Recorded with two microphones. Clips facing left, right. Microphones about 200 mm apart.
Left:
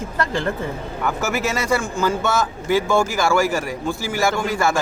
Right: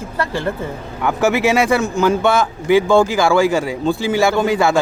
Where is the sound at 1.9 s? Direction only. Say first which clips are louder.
Right 5 dB; 15° right (ahead or behind).